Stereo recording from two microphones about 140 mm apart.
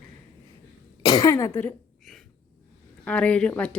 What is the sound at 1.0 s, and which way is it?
Speech, 30° left (ahead or behind).